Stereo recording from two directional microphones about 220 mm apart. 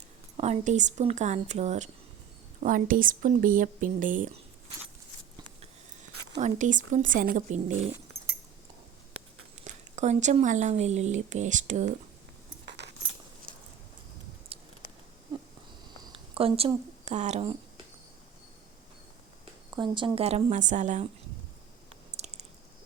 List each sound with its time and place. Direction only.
0.3 s speech: 30° right (ahead or behind)
6.4 s speech: 35° right (ahead or behind)
9.6 s speech: 30° right (ahead or behind)
12.6 s scissors: 50° right (ahead or behind)
14.5 s a sound: 25° right (ahead or behind)
16.1 s speech: 25° right (ahead or behind)
19.7 s a woman's voice: 20° right (ahead or behind)
22.1 s chewing: 30° right (ahead or behind)